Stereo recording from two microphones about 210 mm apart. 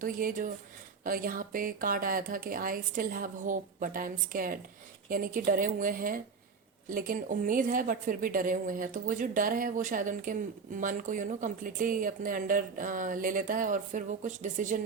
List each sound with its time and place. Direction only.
0.0 s a woman's voice: 40° right (ahead or behind)